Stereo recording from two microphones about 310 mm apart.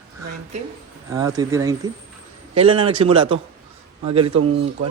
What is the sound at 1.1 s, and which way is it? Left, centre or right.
Speech, centre.